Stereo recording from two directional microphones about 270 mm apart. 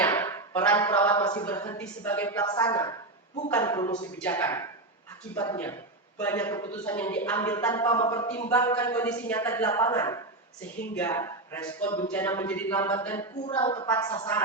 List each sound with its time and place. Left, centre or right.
0.0 s a sound: centre
3.5 s a man's voice: centre
13.5 s a woman's voice: centre